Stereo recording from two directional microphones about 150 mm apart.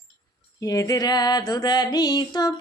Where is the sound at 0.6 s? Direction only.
20° left (ahead or behind).